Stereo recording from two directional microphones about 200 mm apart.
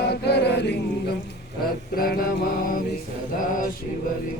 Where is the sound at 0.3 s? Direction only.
55° left (ahead or behind).